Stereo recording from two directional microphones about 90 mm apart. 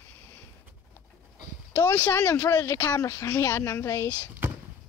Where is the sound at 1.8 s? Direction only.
25° left (ahead or behind).